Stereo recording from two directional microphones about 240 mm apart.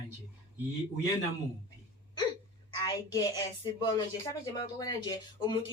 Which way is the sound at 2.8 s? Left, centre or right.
Centre.